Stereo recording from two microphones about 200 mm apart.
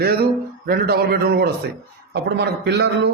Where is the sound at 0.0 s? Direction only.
50° right (ahead or behind).